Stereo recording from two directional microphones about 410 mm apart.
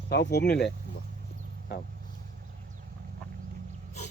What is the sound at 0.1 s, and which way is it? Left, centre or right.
Speech, left.